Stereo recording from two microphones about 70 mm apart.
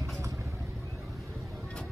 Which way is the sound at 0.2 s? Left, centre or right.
Right.